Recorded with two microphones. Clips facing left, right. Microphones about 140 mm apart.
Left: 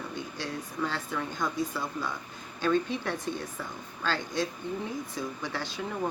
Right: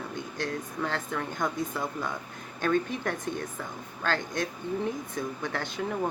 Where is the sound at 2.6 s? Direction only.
50° right (ahead or behind).